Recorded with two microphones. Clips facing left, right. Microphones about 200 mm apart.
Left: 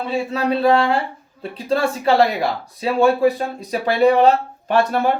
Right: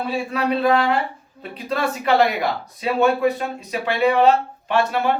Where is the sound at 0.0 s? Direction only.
25° left (ahead or behind).